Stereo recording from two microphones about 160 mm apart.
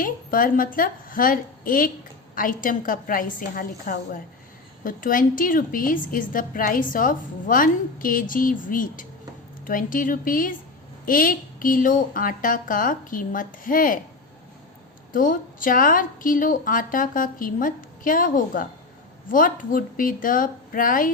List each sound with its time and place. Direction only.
0.0 s a woman's voice: 60° left (ahead or behind)
15.1 s a woman's voice: 55° left (ahead or behind)